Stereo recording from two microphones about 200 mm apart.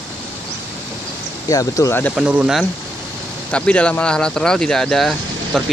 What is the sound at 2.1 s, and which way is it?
Speech, 5° right (ahead or behind).